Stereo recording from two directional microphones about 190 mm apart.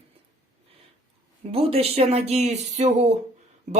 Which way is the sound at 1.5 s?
30° right (ahead or behind).